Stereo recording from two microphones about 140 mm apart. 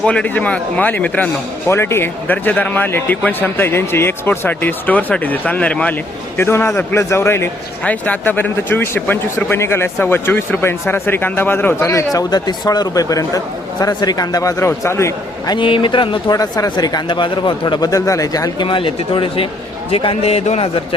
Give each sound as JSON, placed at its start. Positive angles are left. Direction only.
{"t": 0.0, "sound": "a man's voice", "side_deg": 10}
{"t": 15.5, "sound": "a man's voice", "side_deg": 35}